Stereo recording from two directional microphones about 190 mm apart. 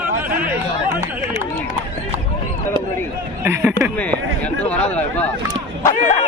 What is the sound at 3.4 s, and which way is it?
Speech, 10° right (ahead or behind).